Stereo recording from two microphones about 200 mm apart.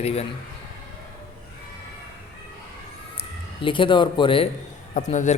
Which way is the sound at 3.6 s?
25° left (ahead or behind).